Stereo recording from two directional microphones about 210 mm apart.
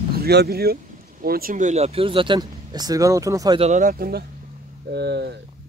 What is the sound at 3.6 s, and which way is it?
Speech, 35° right (ahead or behind).